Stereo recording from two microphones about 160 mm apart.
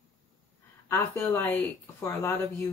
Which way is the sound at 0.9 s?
15° left (ahead or behind).